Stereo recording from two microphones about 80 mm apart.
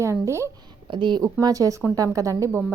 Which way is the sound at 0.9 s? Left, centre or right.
Right.